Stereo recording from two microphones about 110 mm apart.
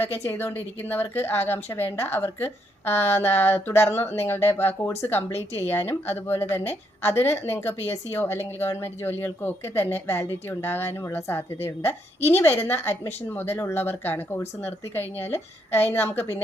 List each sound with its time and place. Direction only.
0.0 s a woman's voice: 20° left (ahead or behind)